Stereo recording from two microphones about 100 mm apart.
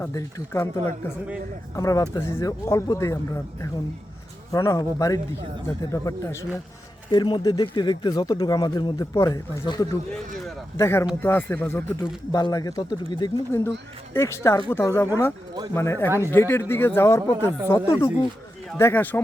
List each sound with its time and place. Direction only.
0.0 s speech: 35° left (ahead or behind)
1.7 s speech: 35° left (ahead or behind)
4.5 s speech: 35° left (ahead or behind)
7.1 s speech: 50° left (ahead or behind)
9.0 s speech: 35° left (ahead or behind)
10.1 s a sound: 5° left (ahead or behind)
10.8 s speech: 25° left (ahead or behind)
12.3 s speech: 35° left (ahead or behind)
13.5 s speech: 25° left (ahead or behind)